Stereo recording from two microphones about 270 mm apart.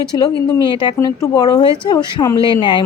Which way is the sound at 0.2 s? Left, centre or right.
Centre.